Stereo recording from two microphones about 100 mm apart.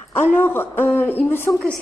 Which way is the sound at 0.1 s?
20° left (ahead or behind).